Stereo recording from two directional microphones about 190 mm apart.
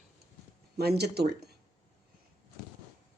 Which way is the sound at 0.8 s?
55° right (ahead or behind).